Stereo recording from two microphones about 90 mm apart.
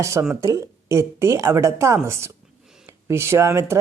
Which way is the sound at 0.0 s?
35° right (ahead or behind).